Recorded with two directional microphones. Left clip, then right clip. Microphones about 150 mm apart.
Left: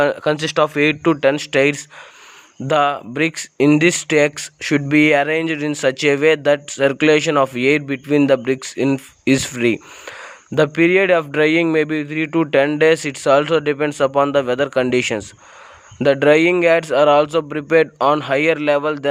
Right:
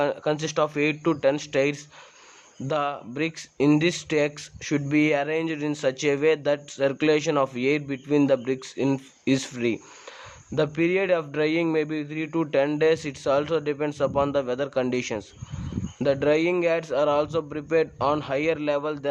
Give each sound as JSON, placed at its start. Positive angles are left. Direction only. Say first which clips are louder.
{"t": 0.0, "sound": "speech", "louder": "left 8 dB", "side_deg": 35}